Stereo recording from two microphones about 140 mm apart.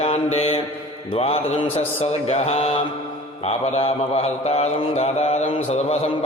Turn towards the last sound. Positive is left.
turn(degrees=45)  # may be behind; listen again after turning